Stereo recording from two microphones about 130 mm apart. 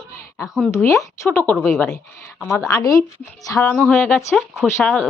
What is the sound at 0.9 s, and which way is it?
Speech, 25° left (ahead or behind).